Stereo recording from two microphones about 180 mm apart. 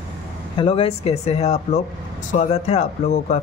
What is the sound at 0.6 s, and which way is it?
A man's voice, 30° left (ahead or behind).